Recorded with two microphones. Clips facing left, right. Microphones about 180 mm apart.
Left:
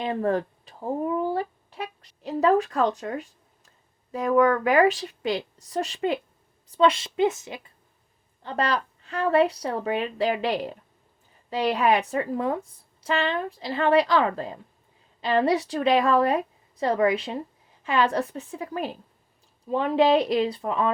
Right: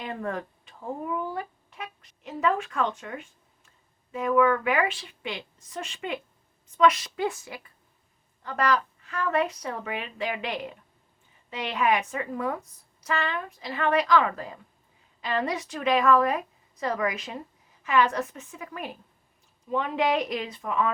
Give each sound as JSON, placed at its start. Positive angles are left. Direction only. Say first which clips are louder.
{"t": 0.0, "sound": "a woman's voice", "louder": "left 8 dB", "side_deg": 30}